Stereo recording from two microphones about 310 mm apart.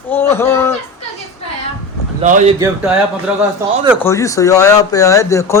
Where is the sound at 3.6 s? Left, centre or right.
Centre.